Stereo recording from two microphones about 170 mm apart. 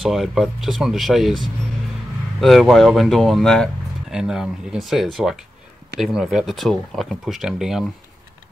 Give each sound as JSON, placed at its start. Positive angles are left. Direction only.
{"t": 0.0, "sound": "speech", "side_deg": 0}